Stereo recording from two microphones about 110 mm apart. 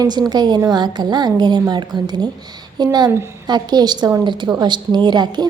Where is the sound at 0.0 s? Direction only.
40° right (ahead or behind).